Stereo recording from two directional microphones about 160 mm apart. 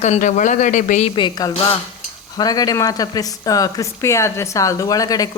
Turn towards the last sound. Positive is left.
turn(degrees=20)  # may be behind; listen again after turning